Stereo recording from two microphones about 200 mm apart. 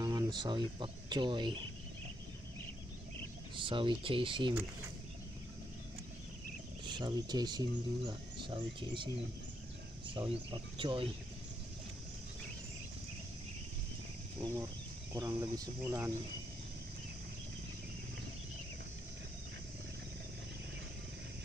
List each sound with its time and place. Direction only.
0.0 s speech: 20° right (ahead or behind)
3.5 s speech: 25° right (ahead or behind)
6.9 s speech: 20° right (ahead or behind)
10.1 s speech: 25° right (ahead or behind)
14.4 s speech: 15° right (ahead or behind)